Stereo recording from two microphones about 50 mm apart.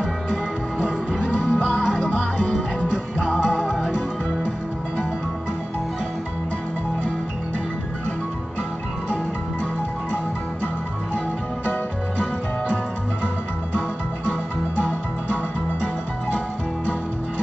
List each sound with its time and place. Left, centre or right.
0.0 s music: centre